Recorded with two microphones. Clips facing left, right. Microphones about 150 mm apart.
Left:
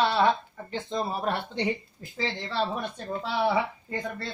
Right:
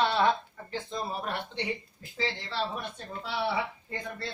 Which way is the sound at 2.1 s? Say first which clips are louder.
Left 3 dB; 45° left (ahead or behind).